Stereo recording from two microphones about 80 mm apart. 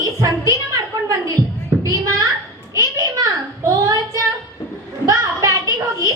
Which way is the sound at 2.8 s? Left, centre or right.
Right.